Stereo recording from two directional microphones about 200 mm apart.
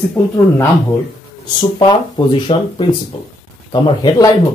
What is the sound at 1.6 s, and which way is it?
Speech, 25° left (ahead or behind).